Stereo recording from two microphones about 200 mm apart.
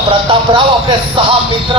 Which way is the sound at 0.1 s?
25° right (ahead or behind).